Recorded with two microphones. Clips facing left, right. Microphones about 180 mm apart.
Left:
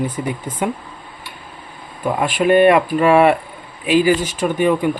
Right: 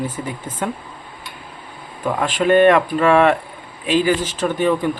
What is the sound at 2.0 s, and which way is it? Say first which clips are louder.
Speech: left 2 dB; 10° left (ahead or behind).